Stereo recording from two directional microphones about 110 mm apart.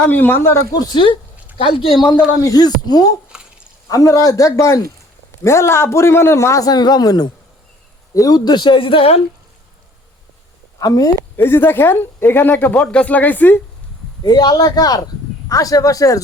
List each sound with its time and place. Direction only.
0.0 s a man's voice: 15° left (ahead or behind)
0.7 s speech: 40° left (ahead or behind)
1.5 s speech: 55° left (ahead or behind)
2.4 s a man's voice: 35° left (ahead or behind); by 9.2 s 60° left (ahead or behind)
10.8 s speech: 35° left (ahead or behind)
11.3 s speech: 20° left (ahead or behind)
14.3 s speech: 35° left (ahead or behind)